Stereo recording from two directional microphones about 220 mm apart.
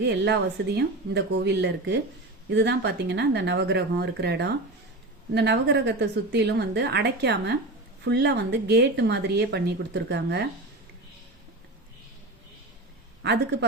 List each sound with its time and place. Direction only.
0.0 s a woman's voice: 50° right (ahead or behind)
13.2 s a woman's voice: 50° right (ahead or behind)